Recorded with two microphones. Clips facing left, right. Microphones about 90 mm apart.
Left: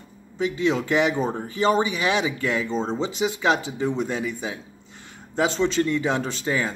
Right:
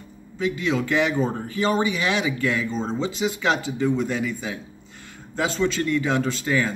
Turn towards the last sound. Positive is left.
turn(degrees=25)  # may be behind; listen again after turning